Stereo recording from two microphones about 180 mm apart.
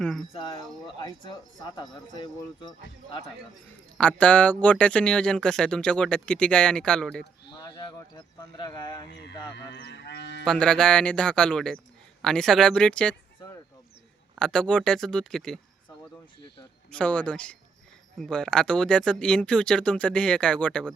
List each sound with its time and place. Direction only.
0.0 s speech: centre (ahead or behind)
0.3 s speech: 25° left (ahead or behind)
3.9 s speech: 5° left (ahead or behind)
7.6 s speech: 25° left (ahead or behind)
9.6 s speech: 65° left (ahead or behind)
10.4 s speech: 5° left (ahead or behind)
14.3 s speech: 5° left (ahead or behind)
16.9 s speech: 5° left (ahead or behind)